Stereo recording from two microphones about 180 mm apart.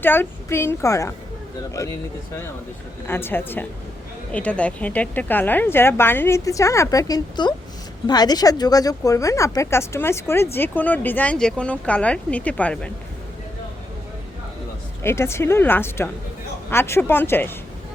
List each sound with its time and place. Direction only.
0.0 s a woman's voice: 10° left (ahead or behind)
3.1 s a woman's voice: 10° left (ahead or behind)
15.0 s a woman's voice: 15° left (ahead or behind)